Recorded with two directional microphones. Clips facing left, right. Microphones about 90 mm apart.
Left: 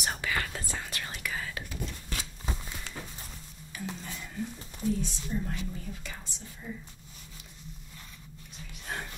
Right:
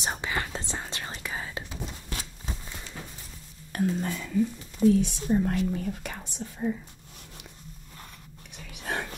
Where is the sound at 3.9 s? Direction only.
80° right; by 6.7 s 60° right (ahead or behind).